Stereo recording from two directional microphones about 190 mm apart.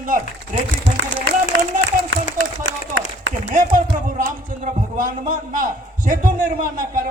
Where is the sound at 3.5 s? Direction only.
45° right (ahead or behind).